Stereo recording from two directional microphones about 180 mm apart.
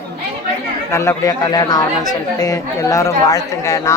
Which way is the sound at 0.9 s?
15° left (ahead or behind).